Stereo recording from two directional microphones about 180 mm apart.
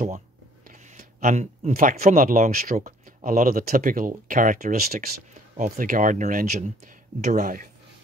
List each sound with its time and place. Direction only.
0.7 s speech: 45° right (ahead or behind)